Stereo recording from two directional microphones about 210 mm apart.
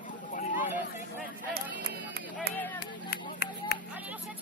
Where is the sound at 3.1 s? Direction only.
50° left (ahead or behind).